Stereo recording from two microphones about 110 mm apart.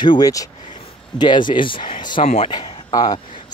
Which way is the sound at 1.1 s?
40° left (ahead or behind).